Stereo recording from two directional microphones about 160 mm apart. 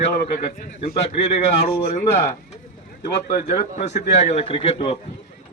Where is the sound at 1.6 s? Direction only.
70° left (ahead or behind).